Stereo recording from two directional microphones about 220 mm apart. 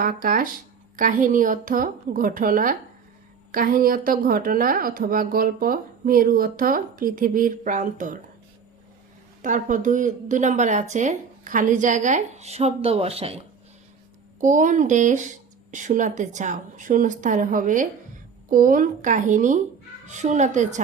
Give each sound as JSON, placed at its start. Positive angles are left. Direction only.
{"t": 0.0, "sound": "a woman's voice", "side_deg": -40}
{"t": 9.4, "sound": "a woman's voice", "side_deg": -35}
{"t": 14.4, "sound": "a woman's voice", "side_deg": -35}